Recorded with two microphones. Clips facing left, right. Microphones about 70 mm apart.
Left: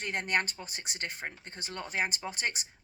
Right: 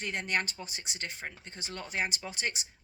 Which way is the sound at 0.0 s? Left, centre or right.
Left.